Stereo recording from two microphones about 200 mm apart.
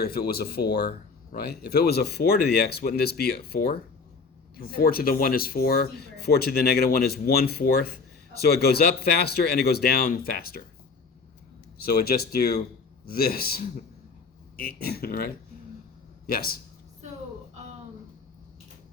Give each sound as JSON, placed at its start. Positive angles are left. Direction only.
{"t": 0.0, "sound": "speech", "side_deg": 50}
{"t": 11.8, "sound": "a man's voice", "side_deg": 50}